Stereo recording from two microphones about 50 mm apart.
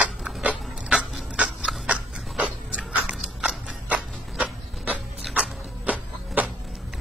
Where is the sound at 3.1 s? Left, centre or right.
Centre.